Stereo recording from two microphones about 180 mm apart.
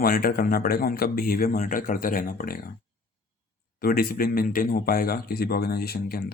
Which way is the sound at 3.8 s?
55° left (ahead or behind).